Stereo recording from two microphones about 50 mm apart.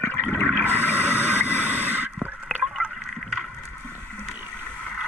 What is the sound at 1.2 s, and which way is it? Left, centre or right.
Vehicle, right.